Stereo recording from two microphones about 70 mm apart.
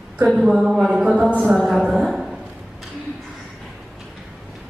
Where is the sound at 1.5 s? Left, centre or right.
Centre.